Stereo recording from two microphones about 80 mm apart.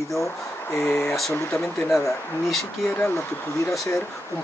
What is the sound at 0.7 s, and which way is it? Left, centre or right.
Speech, left.